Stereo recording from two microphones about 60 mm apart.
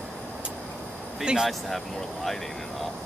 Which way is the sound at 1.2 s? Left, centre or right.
Centre.